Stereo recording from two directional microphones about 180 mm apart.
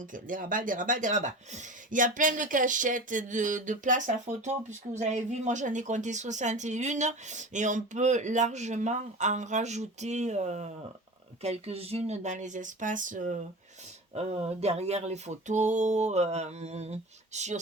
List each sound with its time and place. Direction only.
0.0 s speech: 50° right (ahead or behind)
14.1 s speech: 35° right (ahead or behind)